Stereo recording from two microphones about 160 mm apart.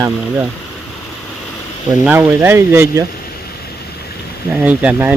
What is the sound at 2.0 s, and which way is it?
Speech, 10° right (ahead or behind).